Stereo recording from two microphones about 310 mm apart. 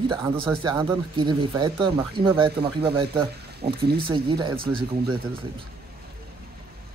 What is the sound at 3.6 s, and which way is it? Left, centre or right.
Speech, right.